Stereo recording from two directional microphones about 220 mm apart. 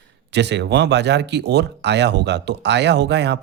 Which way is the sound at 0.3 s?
50° right (ahead or behind).